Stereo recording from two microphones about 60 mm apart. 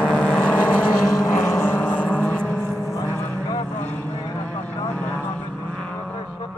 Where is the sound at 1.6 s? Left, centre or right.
Left.